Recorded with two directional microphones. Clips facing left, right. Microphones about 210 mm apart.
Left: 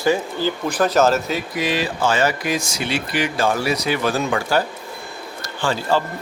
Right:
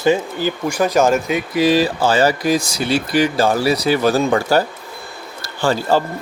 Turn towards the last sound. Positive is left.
turn(degrees=-40)  # may be behind; listen again after turning